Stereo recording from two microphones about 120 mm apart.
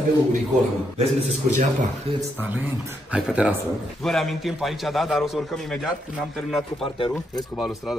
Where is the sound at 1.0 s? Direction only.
65° right (ahead or behind).